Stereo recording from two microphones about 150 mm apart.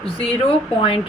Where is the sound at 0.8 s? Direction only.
40° left (ahead or behind).